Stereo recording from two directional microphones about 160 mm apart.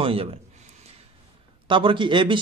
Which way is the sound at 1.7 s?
30° right (ahead or behind).